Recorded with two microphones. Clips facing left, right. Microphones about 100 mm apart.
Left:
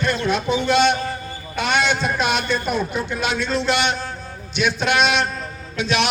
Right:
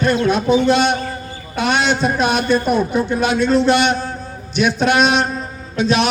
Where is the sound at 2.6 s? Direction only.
45° right (ahead or behind).